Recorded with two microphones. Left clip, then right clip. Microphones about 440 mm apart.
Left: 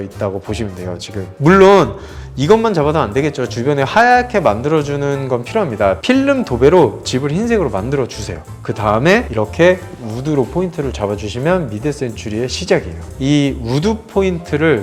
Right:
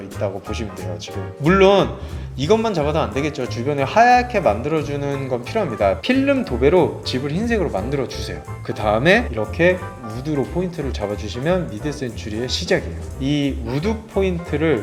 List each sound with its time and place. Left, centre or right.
1.5 s a man's voice: left